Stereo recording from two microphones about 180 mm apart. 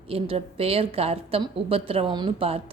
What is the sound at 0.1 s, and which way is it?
A woman's voice, 30° right (ahead or behind).